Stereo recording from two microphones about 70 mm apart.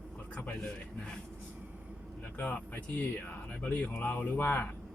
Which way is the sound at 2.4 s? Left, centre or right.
Left.